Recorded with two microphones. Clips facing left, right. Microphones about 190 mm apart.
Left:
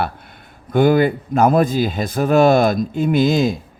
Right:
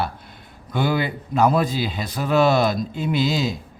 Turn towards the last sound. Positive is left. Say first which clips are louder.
# left 6 dB
turn(degrees=50)  # may be behind; listen again after turning